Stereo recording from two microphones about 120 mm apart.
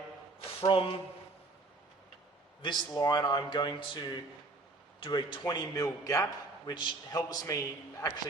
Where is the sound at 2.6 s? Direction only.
40° left (ahead or behind).